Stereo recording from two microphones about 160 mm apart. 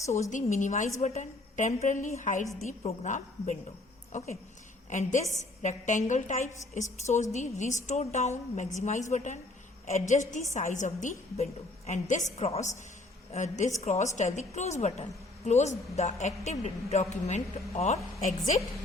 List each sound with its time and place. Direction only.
0.0 s a woman's voice: 20° left (ahead or behind)
0.3 s a woman's voice: 50° left (ahead or behind)
4.9 s a woman's voice: 50° left (ahead or behind)